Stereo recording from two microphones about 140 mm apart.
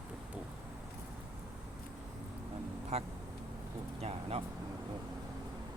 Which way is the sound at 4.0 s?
45° right (ahead or behind).